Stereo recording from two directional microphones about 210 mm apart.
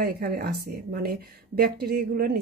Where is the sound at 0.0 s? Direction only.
45° right (ahead or behind).